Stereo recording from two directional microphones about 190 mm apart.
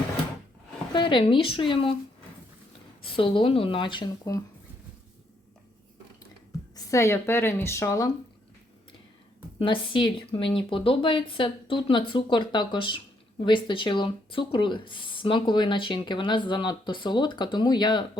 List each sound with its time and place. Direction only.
0.9 s speech: 25° left (ahead or behind)
3.0 s speech: 30° left (ahead or behind)
6.7 s a woman's voice: 15° left (ahead or behind)
9.6 s speech: 25° left (ahead or behind)